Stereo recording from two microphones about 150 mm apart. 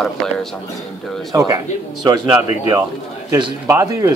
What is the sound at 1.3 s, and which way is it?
Speech, 25° right (ahead or behind).